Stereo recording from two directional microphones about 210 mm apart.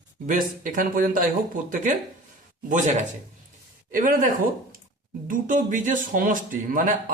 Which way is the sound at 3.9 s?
40° right (ahead or behind).